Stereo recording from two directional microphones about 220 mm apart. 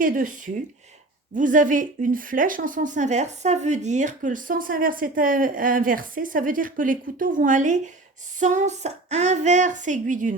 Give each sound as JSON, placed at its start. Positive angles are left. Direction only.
{"t": 0.0, "sound": "speech", "side_deg": -40}